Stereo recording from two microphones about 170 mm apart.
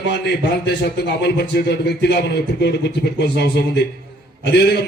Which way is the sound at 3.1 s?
80° left.